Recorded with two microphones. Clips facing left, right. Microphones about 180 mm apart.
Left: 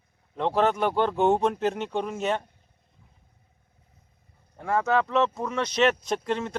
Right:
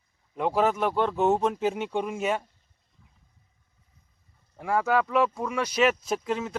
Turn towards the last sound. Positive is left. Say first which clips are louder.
# left 1 dB
turn(degrees=-5)  # may be behind; listen again after turning